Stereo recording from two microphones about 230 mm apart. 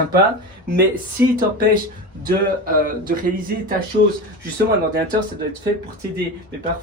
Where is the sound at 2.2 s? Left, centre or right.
Right.